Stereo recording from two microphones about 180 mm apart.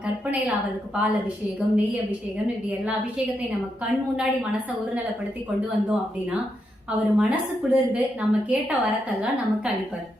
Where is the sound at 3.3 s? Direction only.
5° right (ahead or behind).